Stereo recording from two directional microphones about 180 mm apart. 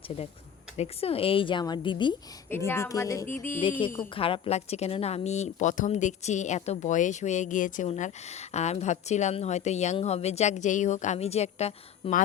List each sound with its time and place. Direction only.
0.8 s speech: 35° left (ahead or behind)
2.5 s speech: 15° left (ahead or behind)
3.6 s speech: 30° left (ahead or behind)